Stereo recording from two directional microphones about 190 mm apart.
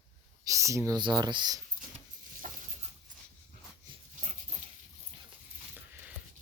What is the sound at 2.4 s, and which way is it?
Dog, 45° right (ahead or behind).